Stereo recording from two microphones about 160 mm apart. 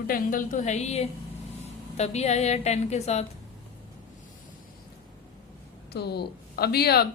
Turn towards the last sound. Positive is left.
turn(degrees=80)